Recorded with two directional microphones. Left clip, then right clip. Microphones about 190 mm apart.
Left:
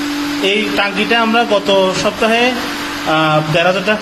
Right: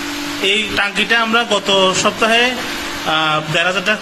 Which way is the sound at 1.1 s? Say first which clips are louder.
Left 3 dB; 5° right (ahead or behind).